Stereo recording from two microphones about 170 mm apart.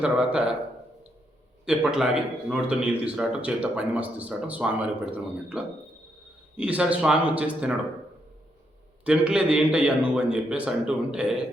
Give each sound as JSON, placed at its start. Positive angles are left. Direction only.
{"t": 0.0, "sound": "speech", "side_deg": -5}
{"t": 1.6, "sound": "speech", "side_deg": -5}
{"t": 9.0, "sound": "speech", "side_deg": -5}